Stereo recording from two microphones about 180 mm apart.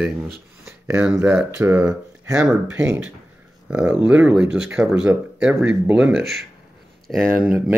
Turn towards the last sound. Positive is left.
turn(degrees=-5)  # may be behind; listen again after turning